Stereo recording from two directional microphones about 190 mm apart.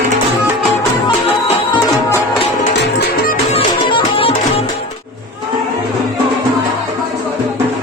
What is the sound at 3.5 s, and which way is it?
Music, 25° left (ahead or behind).